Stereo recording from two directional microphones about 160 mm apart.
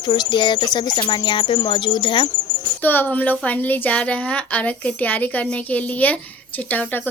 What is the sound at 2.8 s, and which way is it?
A woman's voice, 10° left (ahead or behind).